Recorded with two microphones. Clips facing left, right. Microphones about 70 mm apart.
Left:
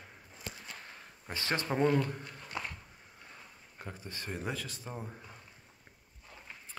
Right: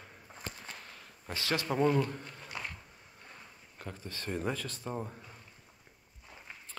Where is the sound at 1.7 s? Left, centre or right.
Left.